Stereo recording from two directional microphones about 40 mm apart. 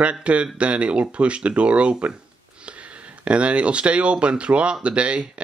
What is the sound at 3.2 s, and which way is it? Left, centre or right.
Speech, right.